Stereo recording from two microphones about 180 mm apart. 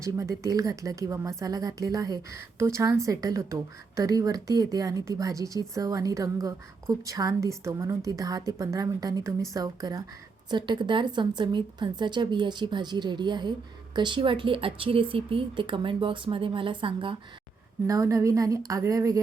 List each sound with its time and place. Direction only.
0.0 s a woman's voice: 15° right (ahead or behind)
17.8 s a woman's voice: 20° right (ahead or behind)